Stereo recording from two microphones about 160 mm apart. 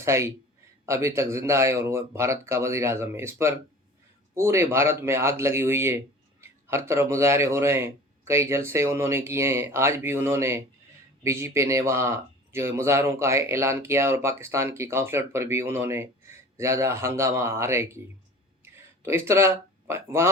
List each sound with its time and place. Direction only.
0.0 s a man's voice: 15° right (ahead or behind)